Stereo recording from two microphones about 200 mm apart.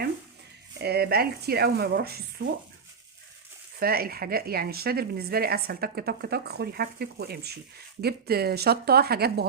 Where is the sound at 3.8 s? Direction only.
50° right (ahead or behind).